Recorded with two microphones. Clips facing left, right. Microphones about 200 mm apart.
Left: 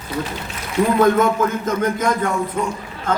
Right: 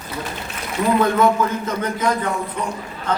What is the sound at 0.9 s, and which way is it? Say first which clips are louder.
A man's voice: left 1 dB; 45° left (ahead or behind).